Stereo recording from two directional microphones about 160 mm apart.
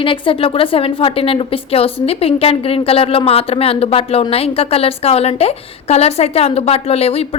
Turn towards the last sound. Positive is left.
turn(degrees=40)  # may be behind; listen again after turning